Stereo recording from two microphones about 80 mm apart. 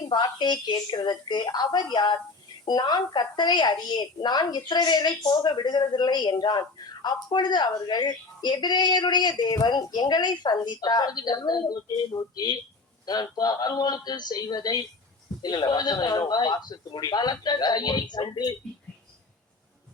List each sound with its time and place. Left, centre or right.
0.0 s a woman's voice: left